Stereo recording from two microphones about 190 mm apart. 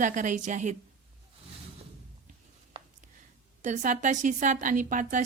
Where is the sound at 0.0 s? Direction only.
40° right (ahead or behind).